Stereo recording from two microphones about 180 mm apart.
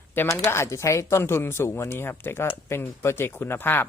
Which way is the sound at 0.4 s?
15° left (ahead or behind).